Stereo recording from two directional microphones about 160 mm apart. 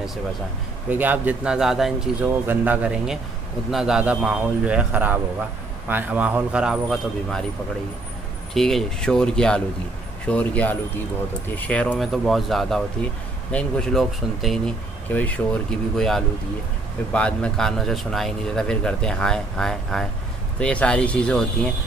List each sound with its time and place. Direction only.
0.8 s speech: 10° right (ahead or behind)
8.5 s speech: centre (ahead or behind)